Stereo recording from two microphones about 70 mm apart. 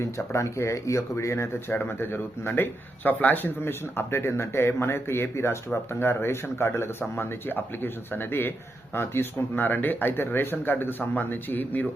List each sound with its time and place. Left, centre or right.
0.0 s speech: left